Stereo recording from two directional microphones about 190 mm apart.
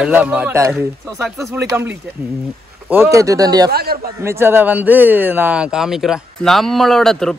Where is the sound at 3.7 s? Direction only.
55° right (ahead or behind).